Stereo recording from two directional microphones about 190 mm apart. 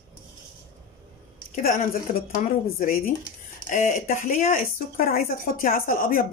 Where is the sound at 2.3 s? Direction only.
45° left (ahead or behind).